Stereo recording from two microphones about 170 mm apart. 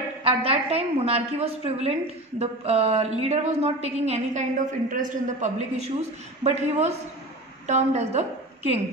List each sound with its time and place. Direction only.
0.2 s a woman's voice: 35° right (ahead or behind)